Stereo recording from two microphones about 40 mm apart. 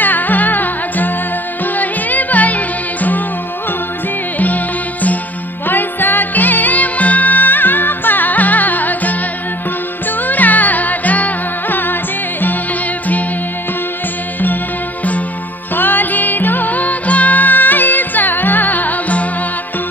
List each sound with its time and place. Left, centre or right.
0.0 s music: left
4.4 s music: left
5.7 s music: left
10.2 s music: left
15.7 s music: left